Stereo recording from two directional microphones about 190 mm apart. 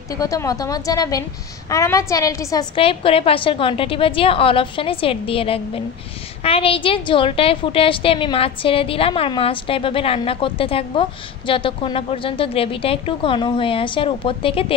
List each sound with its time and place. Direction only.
0.2 s a woman's voice: 20° left (ahead or behind)